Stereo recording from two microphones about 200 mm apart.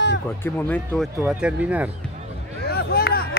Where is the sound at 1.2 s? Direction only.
5° right (ahead or behind).